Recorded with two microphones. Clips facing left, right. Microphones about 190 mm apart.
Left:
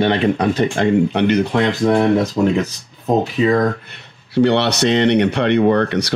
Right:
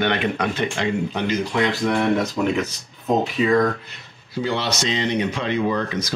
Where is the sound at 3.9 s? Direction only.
70° left (ahead or behind).